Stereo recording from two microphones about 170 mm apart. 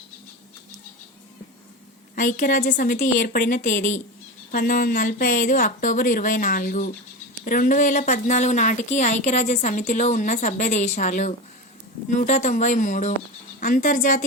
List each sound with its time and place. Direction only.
2.1 s a woman's voice: 55° left (ahead or behind)